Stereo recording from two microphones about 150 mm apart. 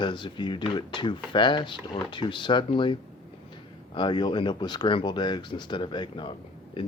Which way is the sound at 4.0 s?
30° left (ahead or behind).